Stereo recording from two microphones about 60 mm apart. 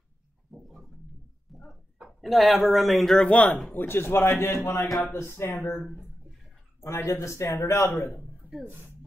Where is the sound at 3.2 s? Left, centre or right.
Left.